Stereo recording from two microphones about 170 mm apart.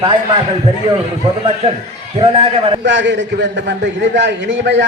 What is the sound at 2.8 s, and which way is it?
A man's voice, 90° right.